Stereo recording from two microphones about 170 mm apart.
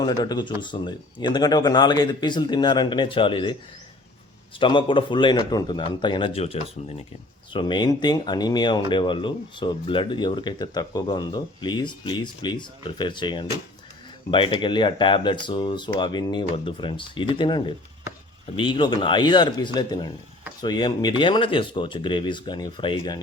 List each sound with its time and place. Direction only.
0.0 s speech: 25° left (ahead or behind)
4.6 s speech: 30° left (ahead or behind)
7.5 s speech: 25° left (ahead or behind)